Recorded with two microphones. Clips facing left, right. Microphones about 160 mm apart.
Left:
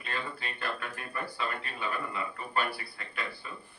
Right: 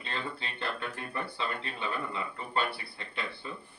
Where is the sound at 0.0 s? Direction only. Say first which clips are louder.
Even; 25° right (ahead or behind).